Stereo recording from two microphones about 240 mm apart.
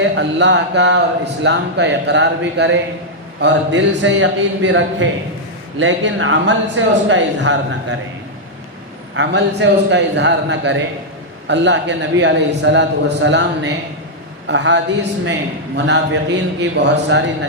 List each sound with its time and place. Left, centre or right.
0.0 s a man's voice: right
9.1 s a man's voice: right